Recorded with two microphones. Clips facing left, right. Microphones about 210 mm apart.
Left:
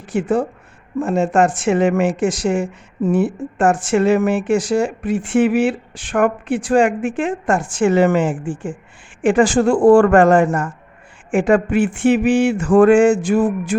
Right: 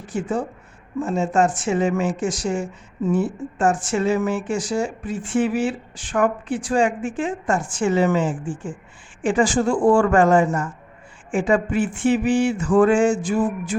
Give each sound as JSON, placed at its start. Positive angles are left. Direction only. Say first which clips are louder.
{"t": 0.1, "sound": "speech", "louder": "left 6 dB", "side_deg": 65}